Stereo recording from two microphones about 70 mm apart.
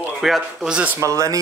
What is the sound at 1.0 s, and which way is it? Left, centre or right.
Speech, right.